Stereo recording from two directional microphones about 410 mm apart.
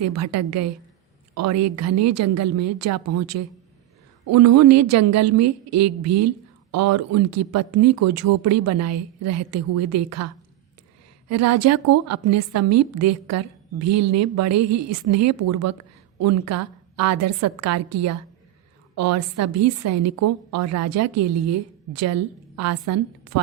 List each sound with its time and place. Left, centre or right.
0.0 s a woman's voice: right
11.3 s a woman's voice: right